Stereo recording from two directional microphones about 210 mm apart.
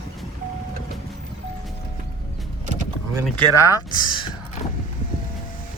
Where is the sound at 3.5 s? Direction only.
15° left (ahead or behind).